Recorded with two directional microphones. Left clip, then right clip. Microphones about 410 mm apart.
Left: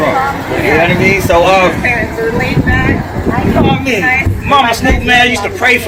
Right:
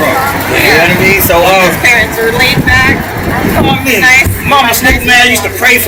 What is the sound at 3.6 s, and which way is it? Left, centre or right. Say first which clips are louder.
Speech: right 5 dB; centre.